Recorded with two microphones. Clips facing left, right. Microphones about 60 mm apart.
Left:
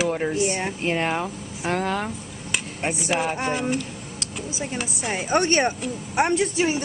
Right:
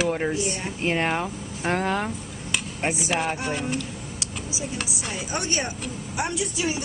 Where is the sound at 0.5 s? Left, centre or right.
Left.